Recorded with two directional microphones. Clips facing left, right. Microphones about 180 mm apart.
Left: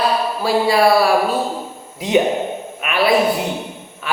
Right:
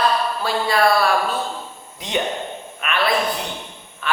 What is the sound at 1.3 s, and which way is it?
Speech, 30° left (ahead or behind).